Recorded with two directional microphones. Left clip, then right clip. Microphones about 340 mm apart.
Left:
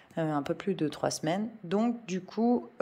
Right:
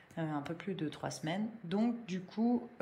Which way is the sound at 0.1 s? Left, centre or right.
Centre.